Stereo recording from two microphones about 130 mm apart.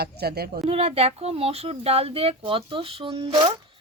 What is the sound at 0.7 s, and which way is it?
Speech, 50° right (ahead or behind).